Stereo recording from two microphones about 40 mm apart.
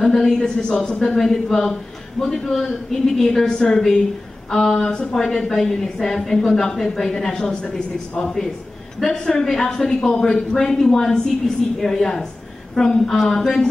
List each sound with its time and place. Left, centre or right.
0.0 s a woman's voice: centre
4.7 s a woman's voice: centre
5.1 s a woman's voice: centre
9.6 s a woman's voice: centre